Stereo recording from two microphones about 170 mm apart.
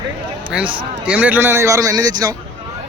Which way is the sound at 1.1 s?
10° right (ahead or behind).